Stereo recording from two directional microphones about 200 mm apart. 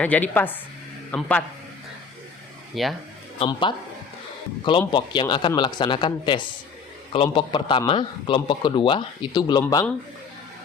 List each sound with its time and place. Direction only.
0.0 s a woman's voice: 5° left (ahead or behind)
2.8 s a man's voice: centre (ahead or behind)
3.3 s a man's voice: 25° left (ahead or behind)
4.9 s a man's voice: 20° left (ahead or behind)